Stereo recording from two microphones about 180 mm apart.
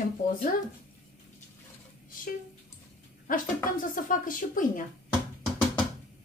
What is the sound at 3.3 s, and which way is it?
Speech, 55° left (ahead or behind).